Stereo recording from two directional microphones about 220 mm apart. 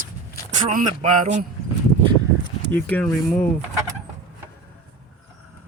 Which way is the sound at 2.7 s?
10° left (ahead or behind).